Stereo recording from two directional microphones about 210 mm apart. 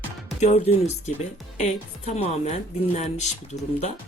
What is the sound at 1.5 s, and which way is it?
Speech, 30° left (ahead or behind).